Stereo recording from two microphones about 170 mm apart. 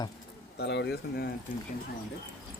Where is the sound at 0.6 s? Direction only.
85° left.